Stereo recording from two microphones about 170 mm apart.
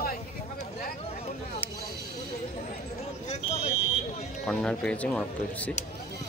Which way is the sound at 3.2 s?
40° left (ahead or behind).